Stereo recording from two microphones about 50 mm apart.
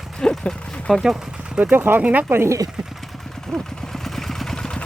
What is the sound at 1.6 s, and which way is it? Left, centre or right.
Speech, right.